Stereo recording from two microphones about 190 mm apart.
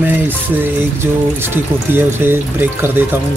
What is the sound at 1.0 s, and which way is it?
Speech, 10° right (ahead or behind).